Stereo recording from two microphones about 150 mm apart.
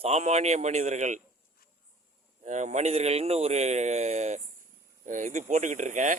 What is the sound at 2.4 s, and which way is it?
Speech, 55° right (ahead or behind).